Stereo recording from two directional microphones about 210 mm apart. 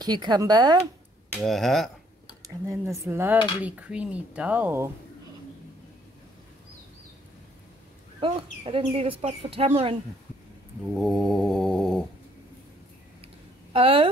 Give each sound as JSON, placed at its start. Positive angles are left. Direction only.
{"t": 0.0, "sound": "speech", "side_deg": -20}
{"t": 1.4, "sound": "a sound", "side_deg": 0}
{"t": 2.4, "sound": "speech", "side_deg": -15}
{"t": 8.2, "sound": "speech", "side_deg": -25}
{"t": 11.0, "sound": "a sound", "side_deg": 0}
{"t": 13.7, "sound": "speech", "side_deg": -25}